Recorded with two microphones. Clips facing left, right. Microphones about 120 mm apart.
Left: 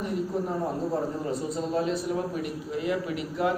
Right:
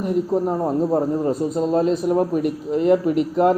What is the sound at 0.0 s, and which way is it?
A man's voice, 45° right (ahead or behind).